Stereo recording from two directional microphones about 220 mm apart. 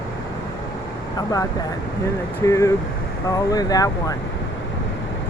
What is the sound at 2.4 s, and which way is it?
Speech, 15° left (ahead or behind).